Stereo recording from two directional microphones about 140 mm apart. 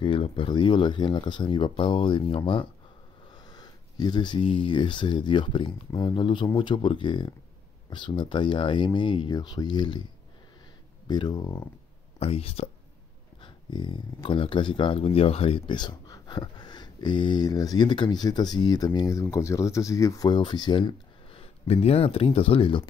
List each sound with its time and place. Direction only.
0.0 s speech: 40° left (ahead or behind)
3.3 s speech: 30° left (ahead or behind)
11.1 s speech: 30° left (ahead or behind)
12.2 s speech: 45° left (ahead or behind)